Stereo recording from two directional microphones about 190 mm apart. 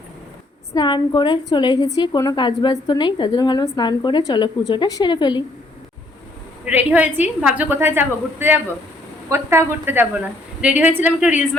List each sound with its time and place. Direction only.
0.7 s a woman's voice: 20° left (ahead or behind)
6.7 s a woman's voice: 10° right (ahead or behind)